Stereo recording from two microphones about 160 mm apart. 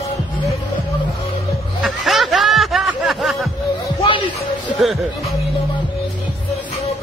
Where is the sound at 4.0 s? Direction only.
30° left (ahead or behind).